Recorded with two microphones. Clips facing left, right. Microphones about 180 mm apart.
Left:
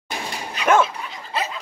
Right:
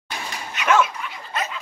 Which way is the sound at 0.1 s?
25° left (ahead or behind).